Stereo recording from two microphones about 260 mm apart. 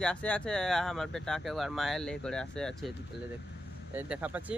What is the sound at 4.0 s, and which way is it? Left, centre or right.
Speech, centre.